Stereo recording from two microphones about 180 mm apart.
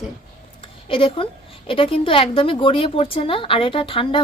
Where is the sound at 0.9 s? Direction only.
30° left (ahead or behind).